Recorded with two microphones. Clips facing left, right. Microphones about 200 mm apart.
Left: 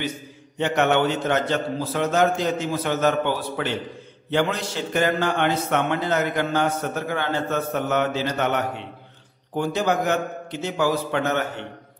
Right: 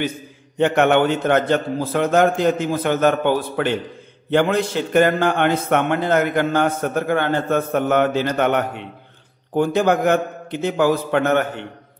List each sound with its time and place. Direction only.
0.6 s a man's voice: 55° right (ahead or behind)